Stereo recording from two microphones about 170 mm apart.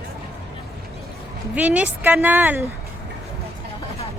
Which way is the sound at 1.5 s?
10° right (ahead or behind).